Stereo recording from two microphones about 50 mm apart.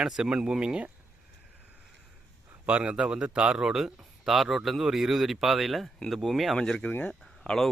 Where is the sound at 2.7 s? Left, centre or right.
Right.